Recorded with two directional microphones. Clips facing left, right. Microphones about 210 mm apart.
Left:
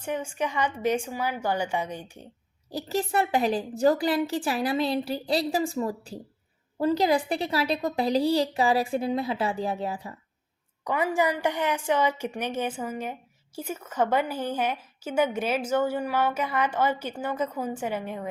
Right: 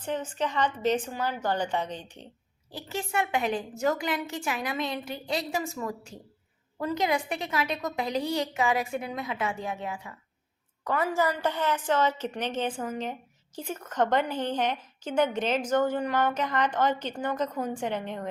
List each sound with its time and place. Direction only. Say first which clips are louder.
0.0 s a woman's voice: left 1 dB; 10° left (ahead or behind)
2.7 s a woman's voice: left 5 dB; 35° left (ahead or behind)
10.8 s a woman's voice: left 2 dB; 15° left (ahead or behind)